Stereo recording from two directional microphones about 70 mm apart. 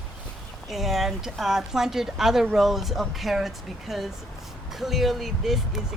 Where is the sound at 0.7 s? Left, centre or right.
Centre.